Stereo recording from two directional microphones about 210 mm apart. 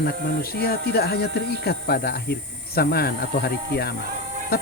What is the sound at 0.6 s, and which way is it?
Speech, 45° left (ahead or behind).